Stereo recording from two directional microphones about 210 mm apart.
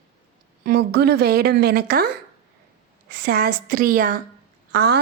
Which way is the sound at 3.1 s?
45° right (ahead or behind).